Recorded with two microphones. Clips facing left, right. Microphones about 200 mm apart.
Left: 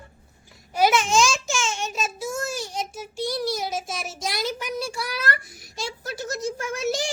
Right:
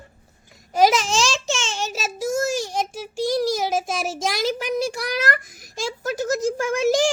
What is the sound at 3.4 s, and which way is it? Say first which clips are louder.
A child's voice: right 5 dB; 90° right.